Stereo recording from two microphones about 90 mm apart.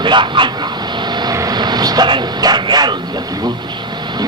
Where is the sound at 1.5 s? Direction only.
50° right (ahead or behind).